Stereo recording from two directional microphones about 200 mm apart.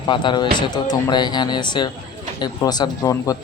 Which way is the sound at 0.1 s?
25° left (ahead or behind).